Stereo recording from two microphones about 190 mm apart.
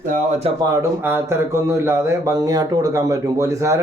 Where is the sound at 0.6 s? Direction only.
15° right (ahead or behind).